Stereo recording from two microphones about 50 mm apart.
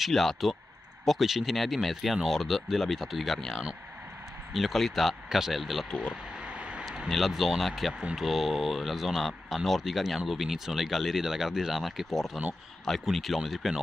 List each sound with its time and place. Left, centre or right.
0.0 s speech: centre
5.9 s speech: centre
6.4 s vehicle: right
7.1 s speech: centre